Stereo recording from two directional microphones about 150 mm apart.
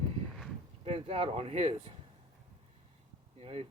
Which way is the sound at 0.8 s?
40° right (ahead or behind).